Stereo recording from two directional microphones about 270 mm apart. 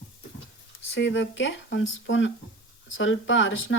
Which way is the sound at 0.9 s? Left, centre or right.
Left.